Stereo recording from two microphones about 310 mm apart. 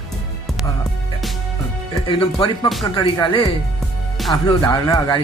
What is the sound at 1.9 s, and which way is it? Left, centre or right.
A man's voice, centre.